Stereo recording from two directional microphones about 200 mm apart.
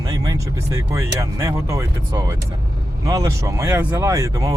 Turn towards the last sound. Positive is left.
turn(degrees=-15)  # may be behind; listen again after turning